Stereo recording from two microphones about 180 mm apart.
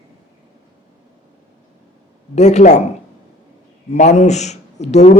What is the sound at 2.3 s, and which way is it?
Speech, 40° left (ahead or behind).